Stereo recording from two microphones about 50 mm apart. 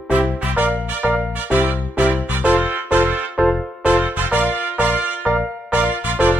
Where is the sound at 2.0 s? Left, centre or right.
Right.